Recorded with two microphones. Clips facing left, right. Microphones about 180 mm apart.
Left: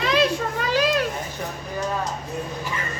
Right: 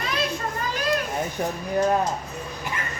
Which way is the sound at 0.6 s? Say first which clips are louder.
Left 5 dB; 90° left.